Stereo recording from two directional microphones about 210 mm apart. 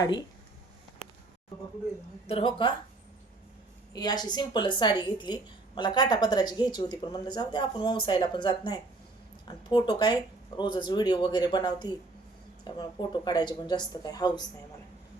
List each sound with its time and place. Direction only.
0.0 s a woman's voice: 20° left (ahead or behind)
2.2 s a woman's voice: 25° left (ahead or behind)
3.9 s a woman's voice: 20° left (ahead or behind)